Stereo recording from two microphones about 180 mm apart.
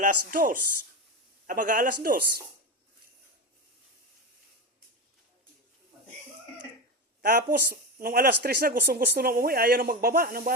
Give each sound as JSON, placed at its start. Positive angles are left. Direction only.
{"t": 0.0, "sound": "speech", "side_deg": -50}
{"t": 7.2, "sound": "speech", "side_deg": -50}